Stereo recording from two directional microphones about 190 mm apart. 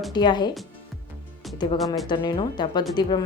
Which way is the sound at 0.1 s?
20° left (ahead or behind).